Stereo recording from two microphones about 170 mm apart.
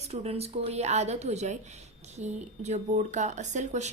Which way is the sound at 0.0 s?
35° right (ahead or behind).